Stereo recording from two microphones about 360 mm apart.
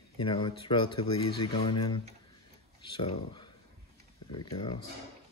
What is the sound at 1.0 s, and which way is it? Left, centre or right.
Speech, left.